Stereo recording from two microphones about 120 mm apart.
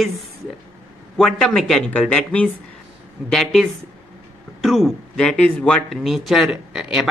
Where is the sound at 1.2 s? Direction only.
Centre (ahead or behind).